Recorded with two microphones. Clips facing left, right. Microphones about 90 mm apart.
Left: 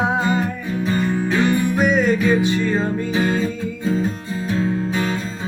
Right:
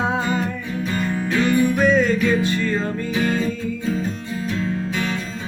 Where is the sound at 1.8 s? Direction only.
15° left (ahead or behind).